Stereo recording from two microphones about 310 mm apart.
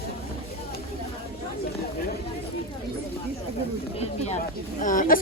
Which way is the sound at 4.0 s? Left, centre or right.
Left.